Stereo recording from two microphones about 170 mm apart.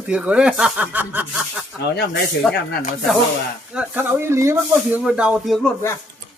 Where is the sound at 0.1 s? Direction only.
5° right (ahead or behind).